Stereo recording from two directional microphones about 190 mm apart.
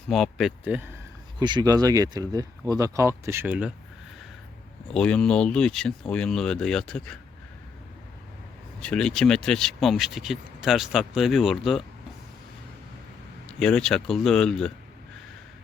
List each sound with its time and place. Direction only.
0.1 s speech: centre (ahead or behind)
1.4 s speech: 20° right (ahead or behind)
4.9 s speech: 5° left (ahead or behind)
8.8 s speech: 5° left (ahead or behind)
13.5 s speech: 5° left (ahead or behind)